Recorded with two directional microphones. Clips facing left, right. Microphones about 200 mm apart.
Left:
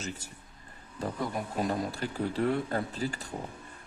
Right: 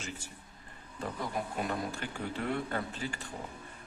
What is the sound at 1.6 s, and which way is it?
A man's voice, 35° left (ahead or behind).